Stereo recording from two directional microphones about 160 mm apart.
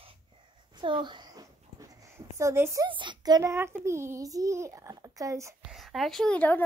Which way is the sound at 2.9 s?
30° right (ahead or behind).